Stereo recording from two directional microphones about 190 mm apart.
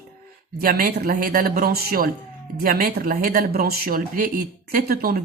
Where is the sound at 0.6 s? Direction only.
50° right (ahead or behind).